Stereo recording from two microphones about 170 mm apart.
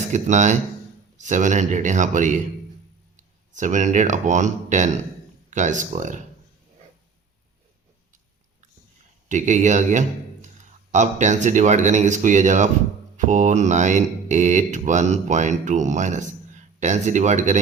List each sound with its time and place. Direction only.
0.1 s speech: 45° right (ahead or behind)
9.3 s speech: 45° right (ahead or behind)